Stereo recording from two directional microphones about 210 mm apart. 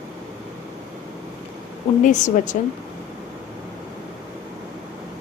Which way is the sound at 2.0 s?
35° left (ahead or behind).